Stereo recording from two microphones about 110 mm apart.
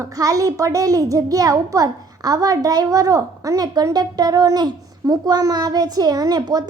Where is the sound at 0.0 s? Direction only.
30° right (ahead or behind).